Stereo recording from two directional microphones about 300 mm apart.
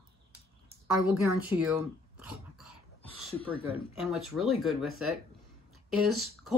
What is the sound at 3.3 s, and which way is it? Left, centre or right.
Speech, centre.